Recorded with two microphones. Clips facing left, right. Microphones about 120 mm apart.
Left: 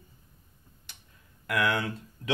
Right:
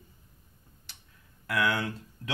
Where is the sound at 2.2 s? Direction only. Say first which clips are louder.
Left 6 dB; 25° left (ahead or behind).